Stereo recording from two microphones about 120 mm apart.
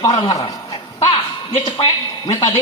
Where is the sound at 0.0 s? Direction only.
35° left (ahead or behind).